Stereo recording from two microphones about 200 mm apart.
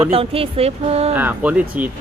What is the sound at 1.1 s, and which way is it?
Speech, 5° right (ahead or behind).